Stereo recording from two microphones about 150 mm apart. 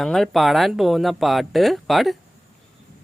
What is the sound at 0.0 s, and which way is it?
Speech, centre (ahead or behind).